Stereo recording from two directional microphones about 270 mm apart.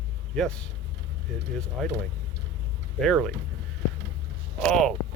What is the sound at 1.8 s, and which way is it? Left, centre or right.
Speech, centre.